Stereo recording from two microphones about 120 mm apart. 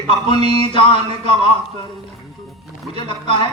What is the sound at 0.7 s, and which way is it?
Speech, 45° left (ahead or behind).